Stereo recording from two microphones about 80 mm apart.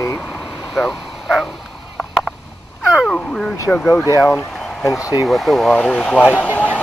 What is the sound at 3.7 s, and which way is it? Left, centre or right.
Speech, centre.